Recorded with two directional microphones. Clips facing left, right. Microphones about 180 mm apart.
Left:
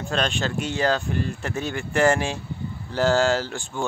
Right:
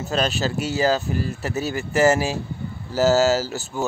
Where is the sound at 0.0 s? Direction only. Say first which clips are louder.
Right 2 dB; 5° right (ahead or behind).